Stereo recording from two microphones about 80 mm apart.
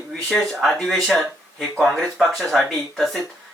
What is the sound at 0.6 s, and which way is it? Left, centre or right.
Speech, centre.